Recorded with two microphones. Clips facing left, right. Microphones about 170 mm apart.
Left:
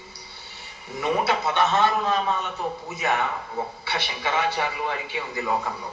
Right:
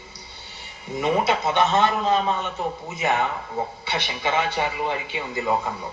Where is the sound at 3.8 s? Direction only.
20° right (ahead or behind).